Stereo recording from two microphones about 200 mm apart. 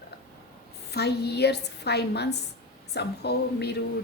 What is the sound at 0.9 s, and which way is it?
A woman's voice, 55° left (ahead or behind).